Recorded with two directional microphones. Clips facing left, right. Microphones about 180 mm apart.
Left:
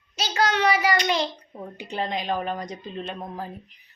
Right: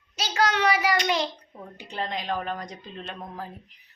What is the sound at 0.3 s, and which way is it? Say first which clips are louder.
Speech: left 1 dB; 5° right (ahead or behind).